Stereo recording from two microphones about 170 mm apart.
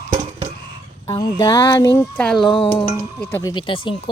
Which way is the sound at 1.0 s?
20° left (ahead or behind).